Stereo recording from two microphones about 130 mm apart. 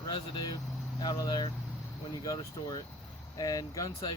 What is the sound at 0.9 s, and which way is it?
Speech, 30° left (ahead or behind).